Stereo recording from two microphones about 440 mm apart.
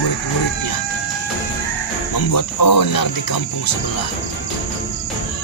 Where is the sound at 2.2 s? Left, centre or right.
Left.